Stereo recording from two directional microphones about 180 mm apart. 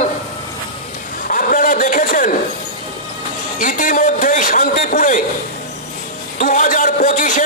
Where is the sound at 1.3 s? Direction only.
50° left (ahead or behind).